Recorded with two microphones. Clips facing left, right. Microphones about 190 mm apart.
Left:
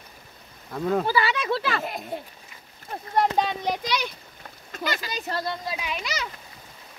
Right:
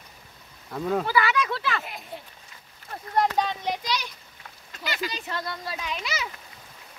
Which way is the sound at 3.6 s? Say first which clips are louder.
Left 2 dB; 50° left (ahead or behind).